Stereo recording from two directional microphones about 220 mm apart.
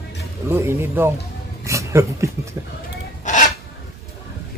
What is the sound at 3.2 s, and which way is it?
Filing, 35° left (ahead or behind).